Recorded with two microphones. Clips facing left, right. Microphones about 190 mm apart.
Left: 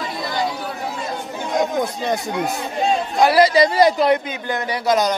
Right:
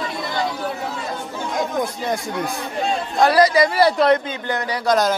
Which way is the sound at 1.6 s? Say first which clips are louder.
Left 2 dB; 20° left (ahead or behind).